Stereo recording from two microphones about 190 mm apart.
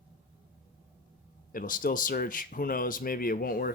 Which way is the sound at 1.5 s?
45° left (ahead or behind).